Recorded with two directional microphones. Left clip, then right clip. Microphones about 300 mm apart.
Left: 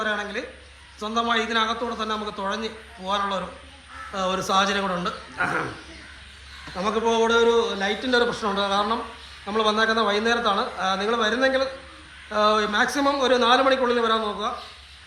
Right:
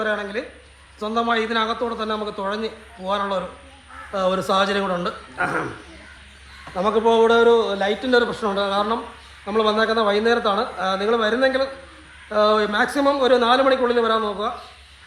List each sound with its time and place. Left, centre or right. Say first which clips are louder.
0.0 s a man's voice: right 3 dB; centre
6.7 s a man's voice: right 5 dB; centre